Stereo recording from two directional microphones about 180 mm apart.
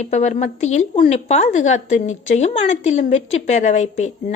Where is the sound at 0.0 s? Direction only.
40° left (ahead or behind).